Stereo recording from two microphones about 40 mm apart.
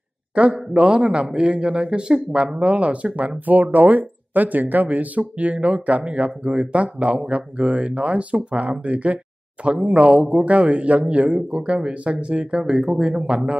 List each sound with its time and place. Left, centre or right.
0.4 s speech: right